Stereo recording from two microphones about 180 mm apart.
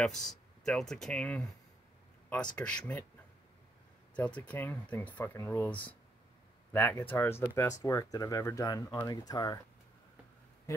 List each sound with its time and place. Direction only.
0.0 s speech: centre (ahead or behind)
4.1 s speech: 10° left (ahead or behind)